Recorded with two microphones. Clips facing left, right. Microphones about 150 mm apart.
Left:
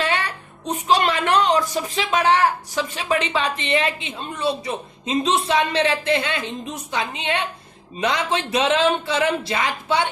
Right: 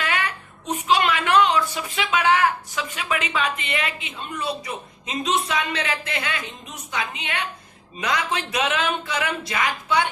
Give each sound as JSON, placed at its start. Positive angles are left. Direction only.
{"t": 0.0, "sound": "a woman's voice", "side_deg": 30}